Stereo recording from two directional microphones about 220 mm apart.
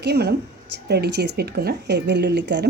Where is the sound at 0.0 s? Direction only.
50° right (ahead or behind).